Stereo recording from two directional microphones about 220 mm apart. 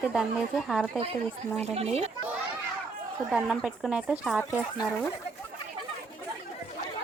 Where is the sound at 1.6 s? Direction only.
30° right (ahead or behind).